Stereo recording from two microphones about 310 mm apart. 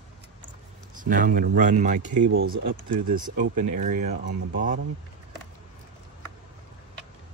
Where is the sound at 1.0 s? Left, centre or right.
Right.